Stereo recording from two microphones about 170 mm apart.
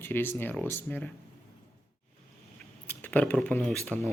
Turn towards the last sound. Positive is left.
turn(degrees=0)  # may be behind; listen again after turning